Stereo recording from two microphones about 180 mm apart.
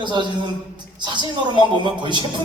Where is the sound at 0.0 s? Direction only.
25° right (ahead or behind).